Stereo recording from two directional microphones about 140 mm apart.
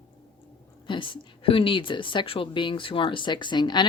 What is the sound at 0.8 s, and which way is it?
Speech, 35° left (ahead or behind).